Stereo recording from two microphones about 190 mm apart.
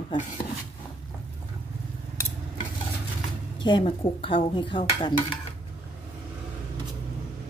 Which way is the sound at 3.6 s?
25° left (ahead or behind).